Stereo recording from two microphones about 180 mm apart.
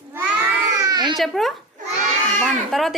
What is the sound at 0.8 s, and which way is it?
Baby cry, 20° right (ahead or behind).